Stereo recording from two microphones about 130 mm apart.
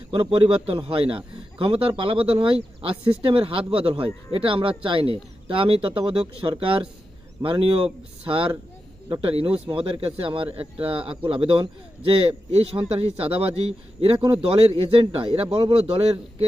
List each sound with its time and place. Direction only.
0.1 s a man's voice: 45° right (ahead or behind)